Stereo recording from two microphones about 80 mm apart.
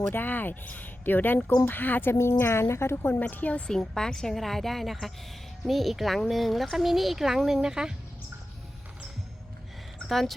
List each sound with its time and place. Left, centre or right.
0.1 s speech: left
3.7 s speech: centre
10.1 s a woman's voice: centre